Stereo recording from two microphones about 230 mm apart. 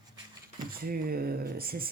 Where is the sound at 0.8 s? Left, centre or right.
Right.